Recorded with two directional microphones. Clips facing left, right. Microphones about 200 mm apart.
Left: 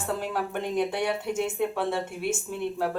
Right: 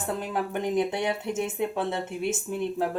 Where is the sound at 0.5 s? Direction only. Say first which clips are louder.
Right 3 dB; 20° right (ahead or behind).